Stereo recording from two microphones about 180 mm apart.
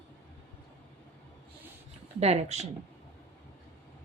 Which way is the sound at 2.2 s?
35° right (ahead or behind).